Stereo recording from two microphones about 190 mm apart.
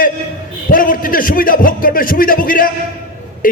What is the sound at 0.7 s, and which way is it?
A man's voice, 45° left (ahead or behind).